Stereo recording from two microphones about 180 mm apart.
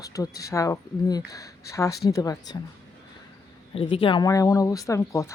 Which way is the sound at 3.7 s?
30° left (ahead or behind).